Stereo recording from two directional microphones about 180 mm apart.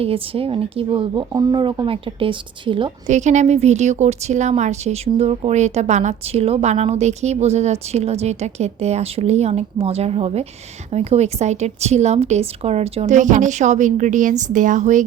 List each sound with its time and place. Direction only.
0.0 s speech: 30° right (ahead or behind)
3.1 s a woman's voice: 40° right (ahead or behind)